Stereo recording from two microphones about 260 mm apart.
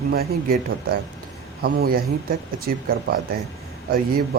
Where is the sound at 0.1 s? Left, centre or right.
Right.